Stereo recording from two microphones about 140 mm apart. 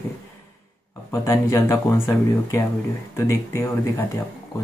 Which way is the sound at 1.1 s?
20° left (ahead or behind).